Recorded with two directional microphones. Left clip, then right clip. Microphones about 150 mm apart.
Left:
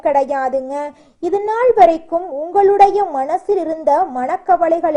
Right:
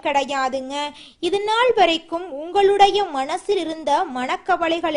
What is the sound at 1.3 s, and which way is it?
A woman's voice, 30° right (ahead or behind).